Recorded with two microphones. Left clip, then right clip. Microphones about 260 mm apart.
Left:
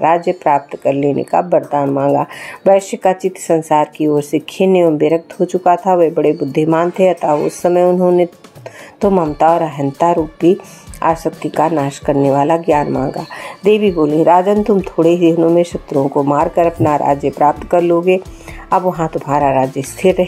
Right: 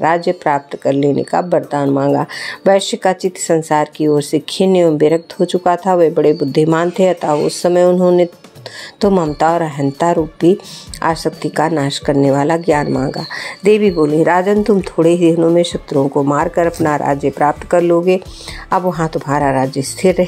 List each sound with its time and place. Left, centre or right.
0.0 s speech: right